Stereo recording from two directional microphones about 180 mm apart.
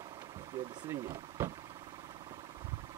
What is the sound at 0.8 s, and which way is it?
Speech, 15° right (ahead or behind).